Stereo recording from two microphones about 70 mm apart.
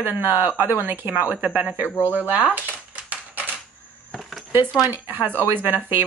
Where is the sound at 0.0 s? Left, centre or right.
Right.